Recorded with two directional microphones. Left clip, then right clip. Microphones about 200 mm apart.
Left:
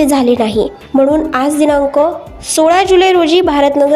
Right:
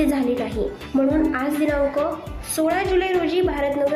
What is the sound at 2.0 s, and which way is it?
Speech, centre (ahead or behind).